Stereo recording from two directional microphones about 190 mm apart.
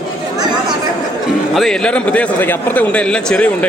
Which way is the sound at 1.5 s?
Centre (ahead or behind).